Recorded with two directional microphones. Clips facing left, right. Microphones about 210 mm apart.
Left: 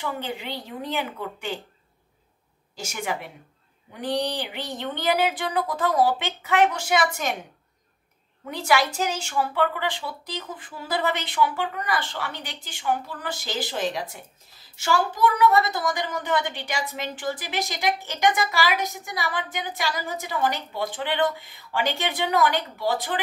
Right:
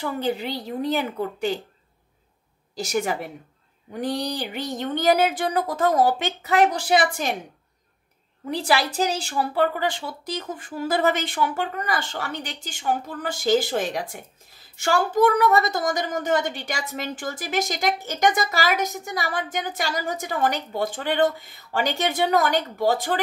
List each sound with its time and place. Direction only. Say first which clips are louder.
0.0 s a woman's voice: right 5 dB; 40° right (ahead or behind)
2.7 s a woman's voice: right 6 dB; 35° right (ahead or behind)
8.5 s a woman's voice: even; 35° right (ahead or behind)